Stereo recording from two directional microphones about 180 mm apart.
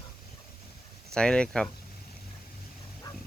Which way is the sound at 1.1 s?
5° left (ahead or behind).